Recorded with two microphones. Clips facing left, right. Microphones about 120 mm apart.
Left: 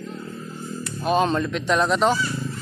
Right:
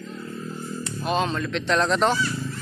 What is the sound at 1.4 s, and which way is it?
Speech, 10° left (ahead or behind).